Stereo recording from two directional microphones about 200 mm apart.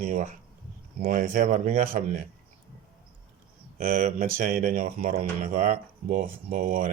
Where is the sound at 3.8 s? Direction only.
45° right (ahead or behind).